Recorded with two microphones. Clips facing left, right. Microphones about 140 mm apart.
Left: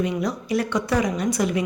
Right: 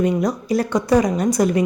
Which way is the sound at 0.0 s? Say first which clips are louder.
Right 5 dB; 45° right (ahead or behind).